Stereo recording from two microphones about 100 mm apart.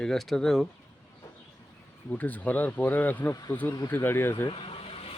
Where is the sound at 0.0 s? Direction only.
5° left (ahead or behind).